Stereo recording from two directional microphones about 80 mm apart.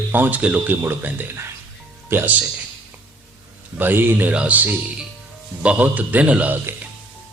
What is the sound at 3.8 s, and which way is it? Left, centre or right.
Speech, right.